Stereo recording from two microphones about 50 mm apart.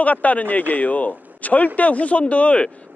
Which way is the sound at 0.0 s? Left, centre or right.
Left.